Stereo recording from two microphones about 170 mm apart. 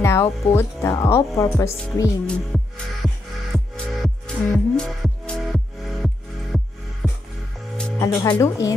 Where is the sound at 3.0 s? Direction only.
5° right (ahead or behind).